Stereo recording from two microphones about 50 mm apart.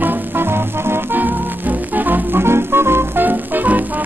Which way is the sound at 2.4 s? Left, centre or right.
Right.